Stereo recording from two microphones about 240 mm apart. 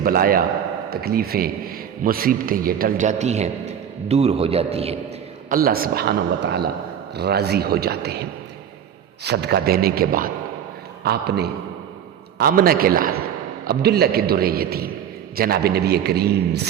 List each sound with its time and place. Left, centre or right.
0.0 s a man's voice: right
5.5 s a man's voice: right